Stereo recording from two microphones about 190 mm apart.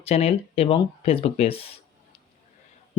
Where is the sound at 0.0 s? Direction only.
35° left (ahead or behind).